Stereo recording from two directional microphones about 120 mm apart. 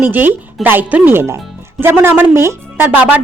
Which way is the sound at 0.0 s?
15° right (ahead or behind).